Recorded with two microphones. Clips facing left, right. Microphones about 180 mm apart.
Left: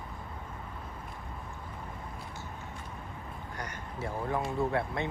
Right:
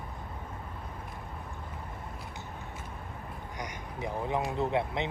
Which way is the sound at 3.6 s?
15° right (ahead or behind).